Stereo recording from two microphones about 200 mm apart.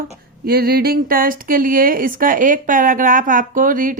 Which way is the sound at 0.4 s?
50° right (ahead or behind).